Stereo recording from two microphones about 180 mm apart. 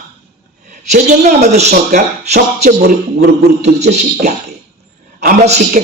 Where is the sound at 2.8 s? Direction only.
65° right (ahead or behind).